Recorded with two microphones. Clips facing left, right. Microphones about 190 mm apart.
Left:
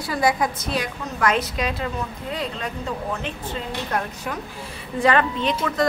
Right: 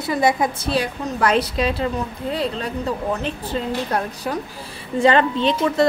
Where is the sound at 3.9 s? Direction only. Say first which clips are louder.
Right 3 dB; 35° right (ahead or behind).